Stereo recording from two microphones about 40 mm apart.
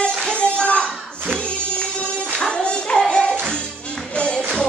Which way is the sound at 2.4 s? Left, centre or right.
Left.